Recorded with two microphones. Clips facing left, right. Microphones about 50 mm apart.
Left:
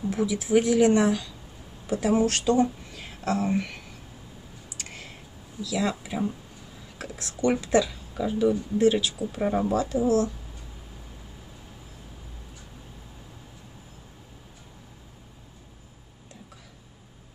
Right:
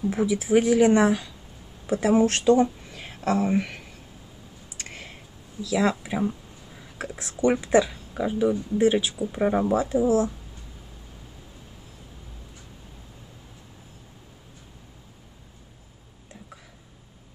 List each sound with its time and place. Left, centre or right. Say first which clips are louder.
0.1 s speech: right 1 dB; right
3.5 s speech: right 3 dB; centre
4.7 s a sound: right 2 dB; right
5.7 s speech: right 4 dB; right